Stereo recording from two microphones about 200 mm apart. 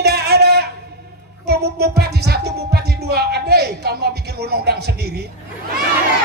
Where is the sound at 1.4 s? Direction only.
55° right (ahead or behind).